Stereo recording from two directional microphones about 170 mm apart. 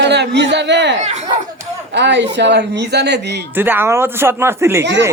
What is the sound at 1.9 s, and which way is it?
Speech, 90° right.